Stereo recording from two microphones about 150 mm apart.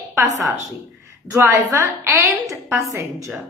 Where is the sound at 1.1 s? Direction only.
15° right (ahead or behind).